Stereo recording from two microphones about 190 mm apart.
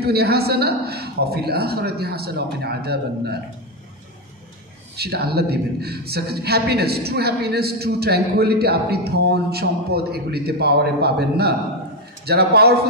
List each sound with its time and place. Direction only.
0.0 s a man's voice: 55° right (ahead or behind)
4.9 s a man's voice: 55° right (ahead or behind)